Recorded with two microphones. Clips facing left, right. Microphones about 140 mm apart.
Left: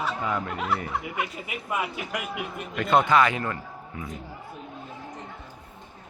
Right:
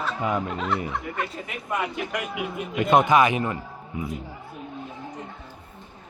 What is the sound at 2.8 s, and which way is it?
A man's voice, 15° right (ahead or behind).